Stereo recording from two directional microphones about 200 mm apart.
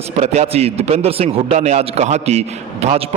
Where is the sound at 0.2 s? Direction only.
35° right (ahead or behind).